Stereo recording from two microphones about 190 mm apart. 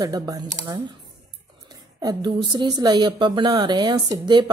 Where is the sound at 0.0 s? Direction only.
20° right (ahead or behind).